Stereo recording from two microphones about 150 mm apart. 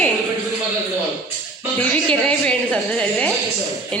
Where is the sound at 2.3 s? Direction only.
5° left (ahead or behind).